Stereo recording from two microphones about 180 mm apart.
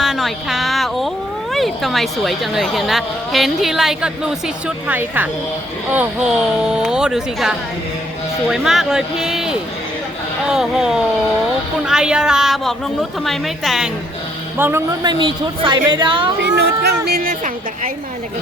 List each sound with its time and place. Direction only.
0.0 s a sound: centre (ahead or behind)
1.5 s a woman's voice: centre (ahead or behind)
14.6 s a woman's voice: 15° right (ahead or behind)
16.4 s a child's voice: 65° right (ahead or behind)
17.1 s a woman's voice: 50° right (ahead or behind)